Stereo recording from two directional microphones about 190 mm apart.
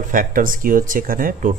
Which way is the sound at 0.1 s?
45° right (ahead or behind).